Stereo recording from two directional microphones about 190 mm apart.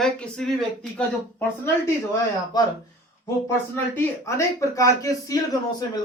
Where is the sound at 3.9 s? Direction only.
15° left (ahead or behind).